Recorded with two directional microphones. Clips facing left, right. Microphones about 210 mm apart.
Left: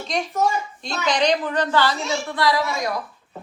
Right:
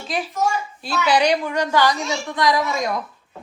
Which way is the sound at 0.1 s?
5° right (ahead or behind).